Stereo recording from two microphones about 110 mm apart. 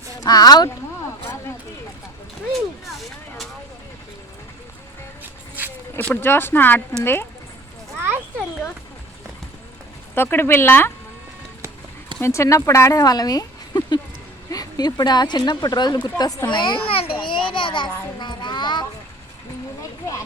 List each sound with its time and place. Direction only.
0.2 s speech: 35° left (ahead or behind)
2.5 s speech: centre (ahead or behind)
5.2 s vehicle: 15° right (ahead or behind)
6.0 s speech: 15° left (ahead or behind)
10.2 s speech: 20° left (ahead or behind)
12.2 s speech: 25° left (ahead or behind)
16.5 s a sound: 45° left (ahead or behind)